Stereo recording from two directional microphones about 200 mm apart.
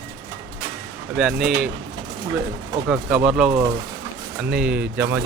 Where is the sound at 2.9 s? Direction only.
5° right (ahead or behind).